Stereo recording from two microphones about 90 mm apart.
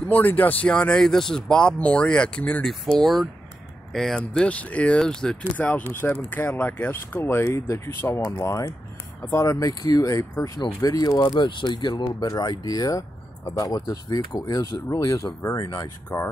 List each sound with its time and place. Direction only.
0.0 s speech: 20° left (ahead or behind)
2.7 s speech: 5° left (ahead or behind); by 15.9 s 40° left (ahead or behind)
16.1 s speech: 25° left (ahead or behind)